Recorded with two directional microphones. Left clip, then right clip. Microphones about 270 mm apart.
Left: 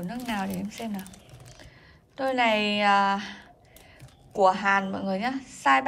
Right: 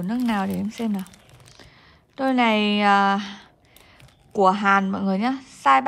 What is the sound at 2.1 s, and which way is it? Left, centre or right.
A woman's voice, centre.